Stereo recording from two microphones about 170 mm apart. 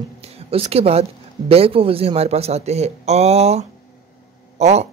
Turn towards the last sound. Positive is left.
turn(degrees=-40)  # may be behind; listen again after turning